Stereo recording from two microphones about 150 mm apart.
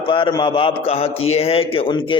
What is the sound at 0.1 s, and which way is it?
A man's voice, 30° left (ahead or behind).